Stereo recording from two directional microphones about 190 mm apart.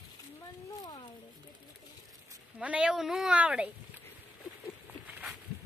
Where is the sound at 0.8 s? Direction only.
25° left (ahead or behind).